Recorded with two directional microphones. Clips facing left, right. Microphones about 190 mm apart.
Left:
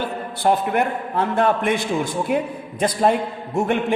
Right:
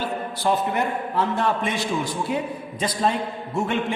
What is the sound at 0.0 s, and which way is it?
A man's voice, 55° left (ahead or behind).